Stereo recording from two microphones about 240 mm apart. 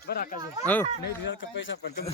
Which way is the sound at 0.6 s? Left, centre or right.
Centre.